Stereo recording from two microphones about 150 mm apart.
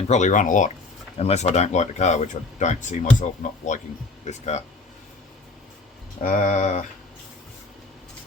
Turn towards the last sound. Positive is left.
turn(degrees=55)  # may be behind; listen again after turning